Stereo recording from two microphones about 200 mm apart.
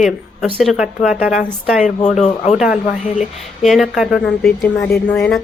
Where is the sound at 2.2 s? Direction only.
35° left (ahead or behind).